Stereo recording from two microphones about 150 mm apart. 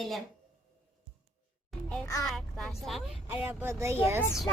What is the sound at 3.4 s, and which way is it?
Speech, 15° right (ahead or behind).